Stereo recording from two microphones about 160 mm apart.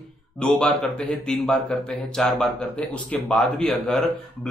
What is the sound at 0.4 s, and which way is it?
Speech, 5° left (ahead or behind).